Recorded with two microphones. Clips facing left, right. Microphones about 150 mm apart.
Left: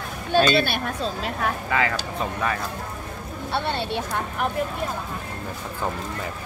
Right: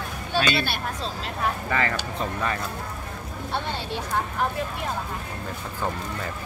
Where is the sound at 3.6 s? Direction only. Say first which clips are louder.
Left 4 dB; 65° left (ahead or behind).